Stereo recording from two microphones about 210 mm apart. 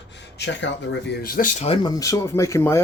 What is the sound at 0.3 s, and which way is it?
Speech, 55° left (ahead or behind).